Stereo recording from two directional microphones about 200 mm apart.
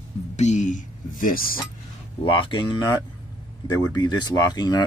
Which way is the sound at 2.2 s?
25° left (ahead or behind).